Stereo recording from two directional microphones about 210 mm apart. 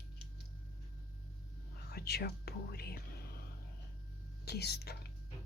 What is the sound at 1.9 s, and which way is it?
Speech, 50° left (ahead or behind).